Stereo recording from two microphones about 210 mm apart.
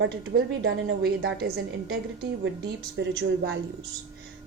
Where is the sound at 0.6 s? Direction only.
55° right (ahead or behind).